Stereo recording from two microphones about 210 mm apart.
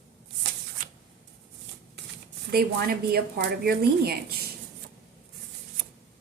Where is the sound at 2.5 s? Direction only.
45° right (ahead or behind).